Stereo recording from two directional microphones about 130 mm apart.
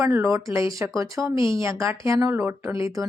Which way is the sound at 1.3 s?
40° left (ahead or behind).